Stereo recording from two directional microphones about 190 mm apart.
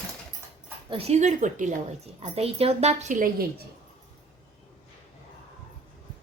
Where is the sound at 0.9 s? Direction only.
35° right (ahead or behind); by 3.6 s 50° right (ahead or behind).